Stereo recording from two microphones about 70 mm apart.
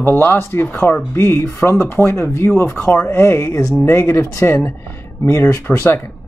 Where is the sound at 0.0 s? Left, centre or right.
Left.